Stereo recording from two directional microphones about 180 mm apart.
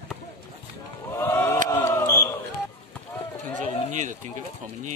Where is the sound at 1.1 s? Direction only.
15° left (ahead or behind).